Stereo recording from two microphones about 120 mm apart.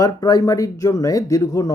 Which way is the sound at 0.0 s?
30° left (ahead or behind).